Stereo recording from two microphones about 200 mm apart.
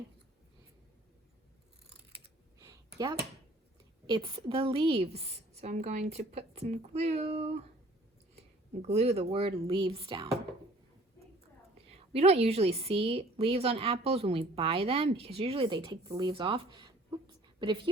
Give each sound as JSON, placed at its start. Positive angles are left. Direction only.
{"t": 2.6, "sound": "a sound", "side_deg": -15}
{"t": 4.0, "sound": "a woman's voice", "side_deg": -25}
{"t": 8.8, "sound": "a woman's voice", "side_deg": -30}
{"t": 12.1, "sound": "a woman's voice", "side_deg": -30}